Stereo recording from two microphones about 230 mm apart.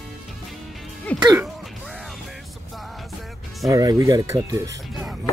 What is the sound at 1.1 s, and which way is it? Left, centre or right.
Music, centre.